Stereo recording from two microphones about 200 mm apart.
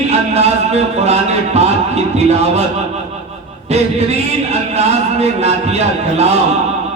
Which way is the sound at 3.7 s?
30° right (ahead or behind).